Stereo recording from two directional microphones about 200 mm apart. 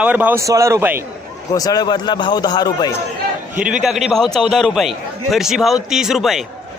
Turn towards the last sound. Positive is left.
turn(degrees=0)  # may be behind; listen again after turning